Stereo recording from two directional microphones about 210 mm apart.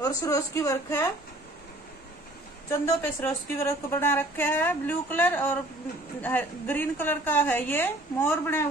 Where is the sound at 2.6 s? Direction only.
10° left (ahead or behind).